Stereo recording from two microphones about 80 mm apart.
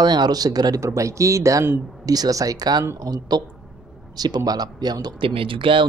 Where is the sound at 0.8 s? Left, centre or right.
Right.